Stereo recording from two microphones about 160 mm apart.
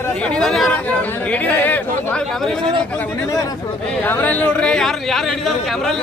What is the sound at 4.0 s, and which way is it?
Speech, 10° left (ahead or behind).